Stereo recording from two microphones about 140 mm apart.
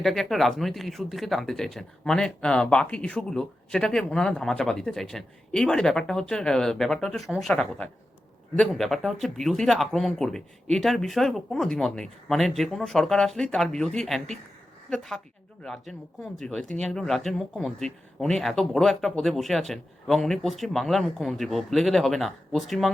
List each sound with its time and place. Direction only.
0.0 s speech: centre (ahead or behind)